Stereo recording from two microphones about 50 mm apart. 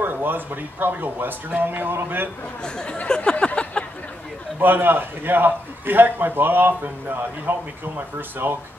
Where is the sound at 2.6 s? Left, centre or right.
Centre.